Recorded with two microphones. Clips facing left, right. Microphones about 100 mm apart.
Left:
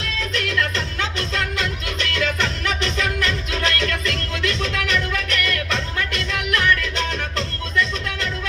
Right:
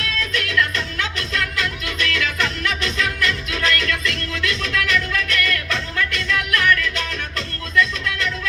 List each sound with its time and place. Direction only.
0.3 s music: 30° left (ahead or behind)